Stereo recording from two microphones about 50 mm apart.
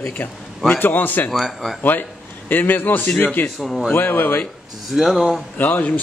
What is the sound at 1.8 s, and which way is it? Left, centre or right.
A man's voice, left.